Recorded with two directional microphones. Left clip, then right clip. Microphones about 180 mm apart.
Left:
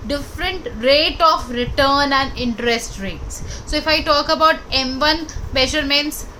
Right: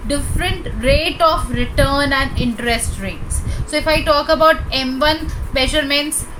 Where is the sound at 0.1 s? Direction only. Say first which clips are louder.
Right 2 dB; 20° left (ahead or behind).